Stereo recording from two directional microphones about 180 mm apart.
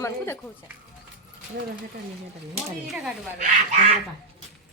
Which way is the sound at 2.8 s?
Centre (ahead or behind).